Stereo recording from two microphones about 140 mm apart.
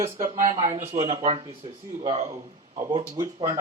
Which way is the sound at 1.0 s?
25° right (ahead or behind).